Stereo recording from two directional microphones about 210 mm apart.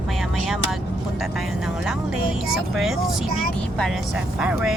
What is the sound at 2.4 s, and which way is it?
Speech, centre (ahead or behind).